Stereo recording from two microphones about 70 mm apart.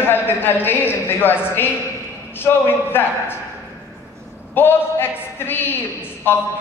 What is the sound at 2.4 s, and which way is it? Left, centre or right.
Speech, left.